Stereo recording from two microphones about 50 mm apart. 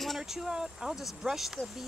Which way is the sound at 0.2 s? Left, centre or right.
Centre.